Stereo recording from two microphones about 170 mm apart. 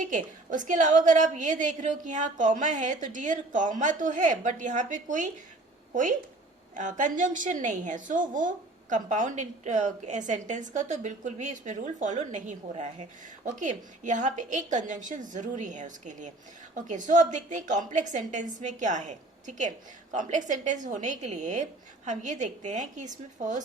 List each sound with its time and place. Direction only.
0.0 s a woman's voice: 50° right (ahead or behind)